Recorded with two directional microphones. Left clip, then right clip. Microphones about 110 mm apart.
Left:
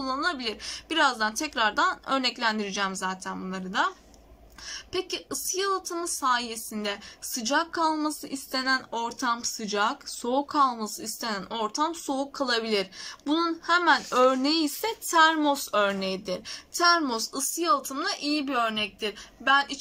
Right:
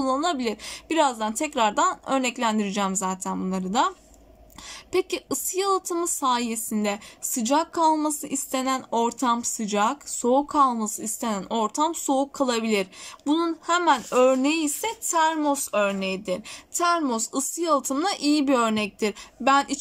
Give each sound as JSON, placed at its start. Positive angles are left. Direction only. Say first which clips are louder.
{"t": 0.0, "sound": "a woman's voice", "louder": "right 4 dB", "side_deg": -45}
{"t": 3.5, "sound": "a woman's voice", "louder": "right 3 dB", "side_deg": -40}
{"t": 8.9, "sound": "a woman's voice", "louder": "right 5 dB", "side_deg": -40}
{"t": 9.8, "sound": "speech", "louder": "right 3 dB", "side_deg": -20}
{"t": 11.7, "sound": "speech", "louder": "right 4 dB", "side_deg": -40}
{"t": 17.6, "sound": "a woman's voice", "louder": "right 2 dB", "side_deg": -60}